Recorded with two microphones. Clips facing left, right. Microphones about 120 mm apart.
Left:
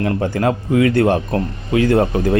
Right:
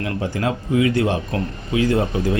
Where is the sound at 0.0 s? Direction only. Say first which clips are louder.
Left 5 dB; 50° left (ahead or behind).